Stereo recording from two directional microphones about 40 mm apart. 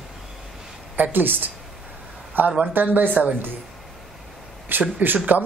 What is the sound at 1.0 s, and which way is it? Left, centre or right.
Speech, right.